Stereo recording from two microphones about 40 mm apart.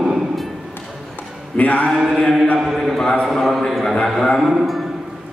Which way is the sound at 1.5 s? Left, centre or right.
Left.